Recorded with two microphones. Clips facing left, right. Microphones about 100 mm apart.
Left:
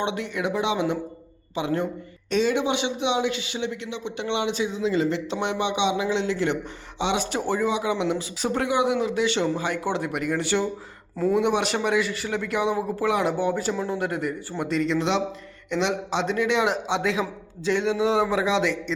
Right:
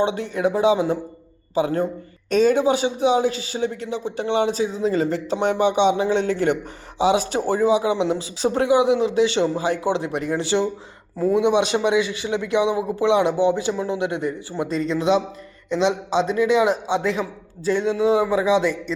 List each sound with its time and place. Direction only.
0.0 s a man's voice: 35° right (ahead or behind)
7.0 s a man's voice: 35° right (ahead or behind)
11.2 s a man's voice: 15° right (ahead or behind)
13.7 s speech: 5° right (ahead or behind)
14.0 s a man's voice: 20° right (ahead or behind)
14.8 s speech: 10° right (ahead or behind)
16.2 s speech: 10° right (ahead or behind)